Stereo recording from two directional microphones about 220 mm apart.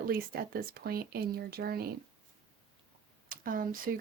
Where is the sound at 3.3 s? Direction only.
40° right (ahead or behind).